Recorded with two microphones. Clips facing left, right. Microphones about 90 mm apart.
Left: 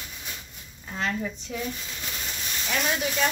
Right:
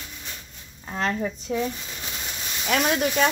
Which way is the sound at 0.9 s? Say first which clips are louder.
Right 3 dB; 35° right (ahead or behind).